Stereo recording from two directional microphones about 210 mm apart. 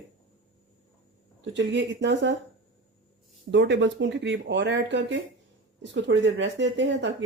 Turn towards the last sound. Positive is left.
turn(degrees=-55)  # may be behind; listen again after turning